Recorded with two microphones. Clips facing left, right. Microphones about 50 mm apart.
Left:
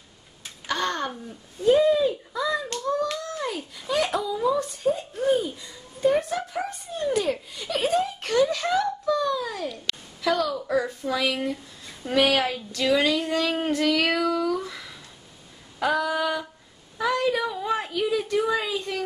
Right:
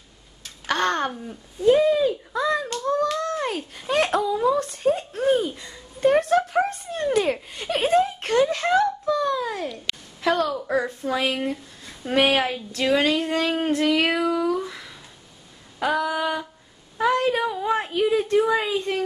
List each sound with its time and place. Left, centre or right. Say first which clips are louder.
0.7 s a sound: right 4 dB; right
3.2 s a woman's voice: right 5 dB; right
12.4 s female singing: right 1 dB; centre
12.7 s a woman's voice: right 1 dB; right
13.5 s child singing: right 3 dB; centre
15.8 s female singing: right 1 dB; centre
17.0 s a sound: right 3 dB; right
17.7 s a woman's voice: right 5 dB; right